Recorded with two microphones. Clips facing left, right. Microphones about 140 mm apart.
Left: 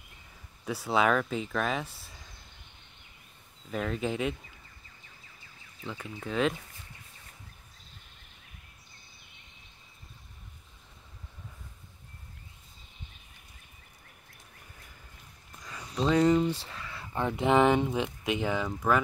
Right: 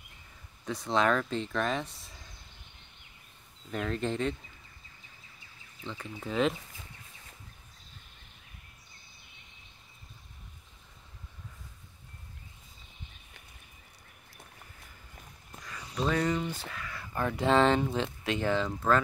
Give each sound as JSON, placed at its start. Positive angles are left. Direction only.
{"t": 0.7, "sound": "speech", "side_deg": 5}
{"t": 3.7, "sound": "speech", "side_deg": 5}
{"t": 5.9, "sound": "speech", "side_deg": 0}
{"t": 16.0, "sound": "speech", "side_deg": 25}